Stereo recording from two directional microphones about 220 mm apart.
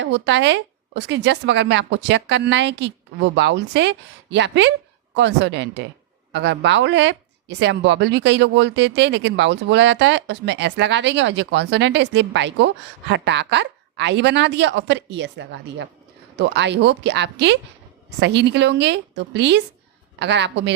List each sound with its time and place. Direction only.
0.0 s speech: 55° right (ahead or behind)